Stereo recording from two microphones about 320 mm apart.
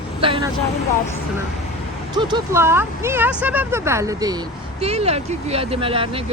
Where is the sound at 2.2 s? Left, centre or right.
Centre.